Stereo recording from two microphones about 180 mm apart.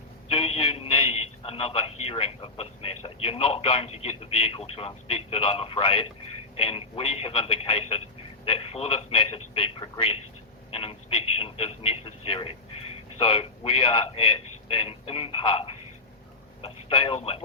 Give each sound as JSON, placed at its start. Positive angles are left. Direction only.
{"t": 0.3, "sound": "a man's voice", "side_deg": 30}